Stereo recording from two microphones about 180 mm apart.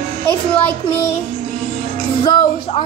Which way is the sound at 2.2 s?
25° left (ahead or behind).